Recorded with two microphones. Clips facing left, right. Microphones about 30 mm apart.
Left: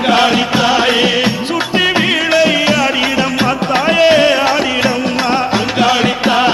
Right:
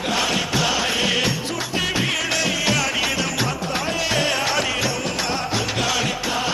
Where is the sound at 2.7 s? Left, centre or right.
Left.